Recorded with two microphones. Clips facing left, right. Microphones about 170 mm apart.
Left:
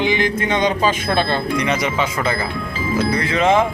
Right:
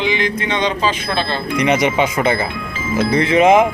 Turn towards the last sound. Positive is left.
turn(degrees=-20)  # may be behind; listen again after turning